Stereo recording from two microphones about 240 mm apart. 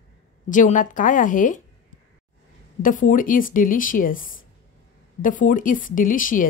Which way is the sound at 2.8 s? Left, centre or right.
Left.